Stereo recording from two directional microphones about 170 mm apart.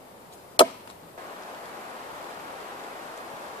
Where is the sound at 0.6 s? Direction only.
30° left (ahead or behind).